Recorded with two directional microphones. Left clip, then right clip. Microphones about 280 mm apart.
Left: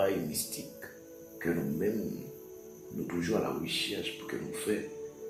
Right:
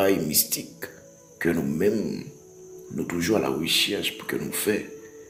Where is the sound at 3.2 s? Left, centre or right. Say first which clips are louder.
Right 9 dB; right.